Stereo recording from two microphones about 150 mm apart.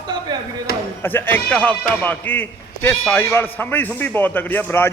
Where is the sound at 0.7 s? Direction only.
90° left.